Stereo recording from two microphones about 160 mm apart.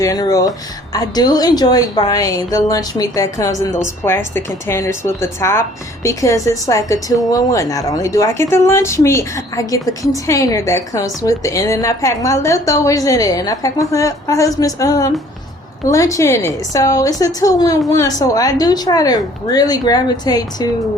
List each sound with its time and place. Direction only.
0.0 s a woman's voice: 20° left (ahead or behind)